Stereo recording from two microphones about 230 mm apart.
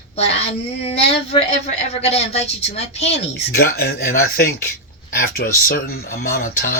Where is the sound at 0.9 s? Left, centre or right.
Left.